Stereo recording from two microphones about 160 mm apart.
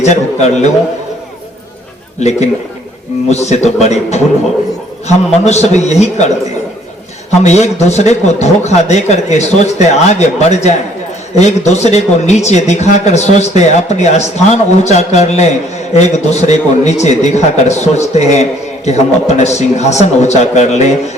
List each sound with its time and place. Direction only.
0.0 s speech: 45° left (ahead or behind)
2.1 s speech: 45° left (ahead or behind)